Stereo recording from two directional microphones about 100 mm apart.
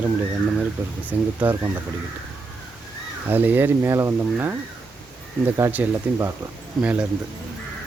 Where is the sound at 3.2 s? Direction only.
20° right (ahead or behind).